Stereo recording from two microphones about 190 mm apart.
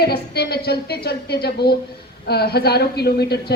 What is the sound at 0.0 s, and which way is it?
A woman's voice, 55° left (ahead or behind).